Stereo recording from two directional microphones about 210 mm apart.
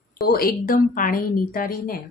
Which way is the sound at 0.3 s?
45° left (ahead or behind).